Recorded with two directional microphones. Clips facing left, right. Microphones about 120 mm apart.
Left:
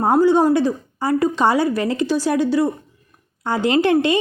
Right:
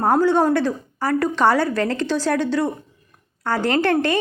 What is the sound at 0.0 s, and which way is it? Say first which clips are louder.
A woman's voice: left 2 dB; 15° left (ahead or behind).